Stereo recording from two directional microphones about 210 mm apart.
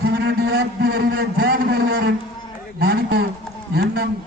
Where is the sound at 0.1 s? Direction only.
55° right (ahead or behind).